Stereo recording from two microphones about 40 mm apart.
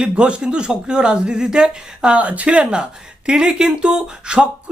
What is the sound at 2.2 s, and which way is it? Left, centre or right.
Speech, right.